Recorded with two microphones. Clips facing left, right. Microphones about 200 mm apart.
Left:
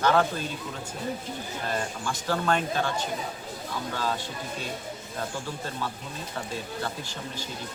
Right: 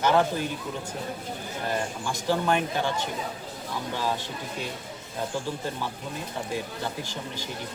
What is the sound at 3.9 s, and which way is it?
Speech, 15° right (ahead or behind).